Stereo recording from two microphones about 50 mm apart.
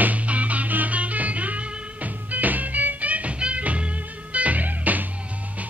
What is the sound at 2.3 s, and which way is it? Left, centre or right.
Music, right.